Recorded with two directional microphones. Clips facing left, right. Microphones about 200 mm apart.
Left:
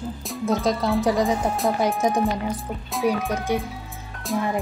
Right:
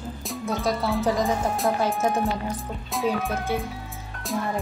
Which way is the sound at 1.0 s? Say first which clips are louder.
Left 1 dB; 10° left (ahead or behind).